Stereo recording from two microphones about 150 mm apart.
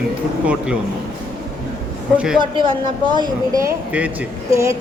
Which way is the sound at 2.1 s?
5° right (ahead or behind).